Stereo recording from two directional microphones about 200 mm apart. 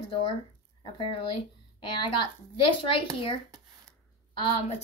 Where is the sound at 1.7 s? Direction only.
25° left (ahead or behind).